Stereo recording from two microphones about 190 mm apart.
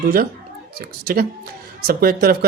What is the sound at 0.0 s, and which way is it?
Speech, 50° right (ahead or behind).